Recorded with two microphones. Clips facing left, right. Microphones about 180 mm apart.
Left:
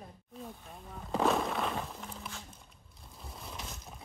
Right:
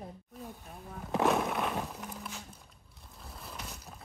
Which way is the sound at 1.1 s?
5° right (ahead or behind).